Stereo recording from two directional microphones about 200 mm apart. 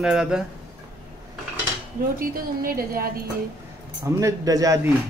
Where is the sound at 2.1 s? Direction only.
45° right (ahead or behind).